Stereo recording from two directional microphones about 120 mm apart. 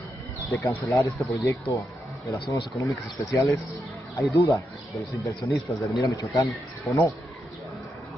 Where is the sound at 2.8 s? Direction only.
25° left (ahead or behind).